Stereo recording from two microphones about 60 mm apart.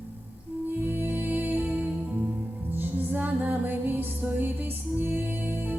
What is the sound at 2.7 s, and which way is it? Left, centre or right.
Music, right.